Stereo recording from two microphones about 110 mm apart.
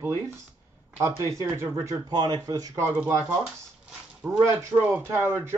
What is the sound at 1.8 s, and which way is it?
Speech, 35° right (ahead or behind).